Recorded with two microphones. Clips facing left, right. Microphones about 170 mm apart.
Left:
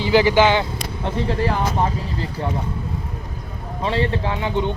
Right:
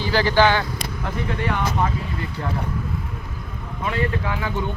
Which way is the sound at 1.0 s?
30° left (ahead or behind).